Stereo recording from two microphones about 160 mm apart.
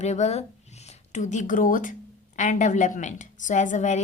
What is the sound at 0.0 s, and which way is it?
A woman's voice, 45° left (ahead or behind).